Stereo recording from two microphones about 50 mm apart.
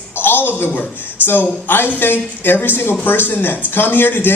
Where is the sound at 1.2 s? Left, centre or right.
Left.